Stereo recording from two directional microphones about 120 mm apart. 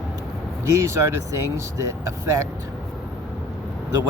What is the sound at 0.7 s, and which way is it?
Speech, 25° right (ahead or behind).